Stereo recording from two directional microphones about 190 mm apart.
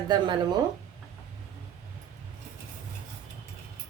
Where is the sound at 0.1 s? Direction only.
25° right (ahead or behind).